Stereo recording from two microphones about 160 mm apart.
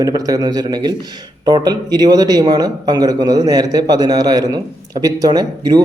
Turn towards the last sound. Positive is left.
turn(degrees=-25)  # may be behind; listen again after turning